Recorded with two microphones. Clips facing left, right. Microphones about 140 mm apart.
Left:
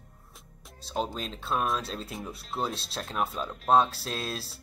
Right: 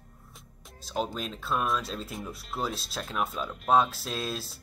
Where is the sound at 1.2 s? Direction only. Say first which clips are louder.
Right 1 dB; 30° left (ahead or behind).